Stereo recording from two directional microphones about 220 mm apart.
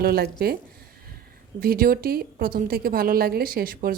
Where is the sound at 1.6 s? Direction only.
40° right (ahead or behind).